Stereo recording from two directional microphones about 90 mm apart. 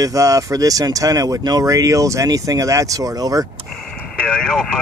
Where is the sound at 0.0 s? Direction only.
40° right (ahead or behind).